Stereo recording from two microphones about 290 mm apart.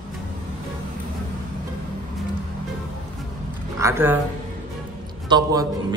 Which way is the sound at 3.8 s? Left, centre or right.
Centre.